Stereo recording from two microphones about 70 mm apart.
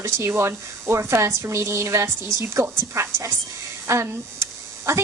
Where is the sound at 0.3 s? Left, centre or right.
Right.